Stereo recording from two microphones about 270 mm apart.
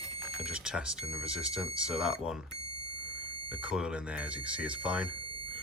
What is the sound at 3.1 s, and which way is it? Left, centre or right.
Smoke detector, right.